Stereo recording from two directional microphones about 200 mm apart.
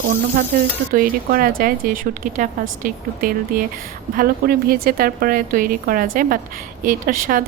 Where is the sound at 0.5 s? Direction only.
40° right (ahead or behind).